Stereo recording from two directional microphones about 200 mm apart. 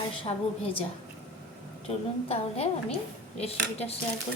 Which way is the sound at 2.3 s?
30° left (ahead or behind).